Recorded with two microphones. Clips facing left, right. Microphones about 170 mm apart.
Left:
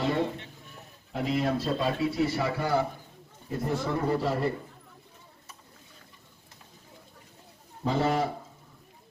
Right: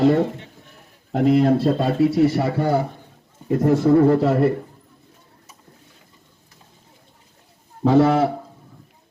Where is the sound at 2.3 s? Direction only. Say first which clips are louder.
Right 7 dB; 50° right (ahead or behind).